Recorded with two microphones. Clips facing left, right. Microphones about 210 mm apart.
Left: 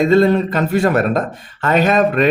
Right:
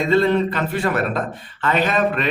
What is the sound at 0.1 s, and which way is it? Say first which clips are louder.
A man's voice: left 4 dB; 40° left (ahead or behind).